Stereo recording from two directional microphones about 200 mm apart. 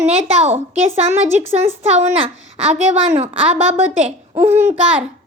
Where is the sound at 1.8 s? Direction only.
30° right (ahead or behind).